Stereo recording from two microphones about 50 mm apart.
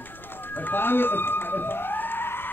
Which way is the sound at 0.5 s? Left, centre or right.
Left.